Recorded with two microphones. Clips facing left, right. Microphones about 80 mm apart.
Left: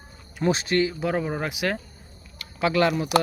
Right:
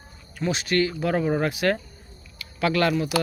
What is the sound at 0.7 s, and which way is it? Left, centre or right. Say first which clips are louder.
Speech: even; centre.